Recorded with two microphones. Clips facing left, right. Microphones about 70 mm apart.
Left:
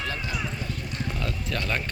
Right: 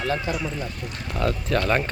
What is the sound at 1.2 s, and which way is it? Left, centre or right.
Speech, right.